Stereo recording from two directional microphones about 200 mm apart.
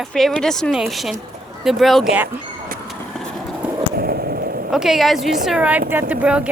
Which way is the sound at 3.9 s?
50° right (ahead or behind).